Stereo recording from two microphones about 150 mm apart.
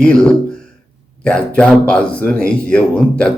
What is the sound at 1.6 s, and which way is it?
A man's voice, 10° left (ahead or behind).